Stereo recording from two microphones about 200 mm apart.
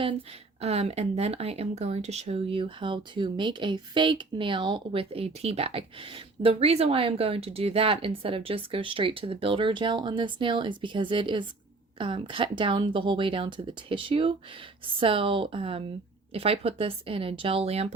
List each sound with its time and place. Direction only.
0.6 s speech: 30° right (ahead or behind)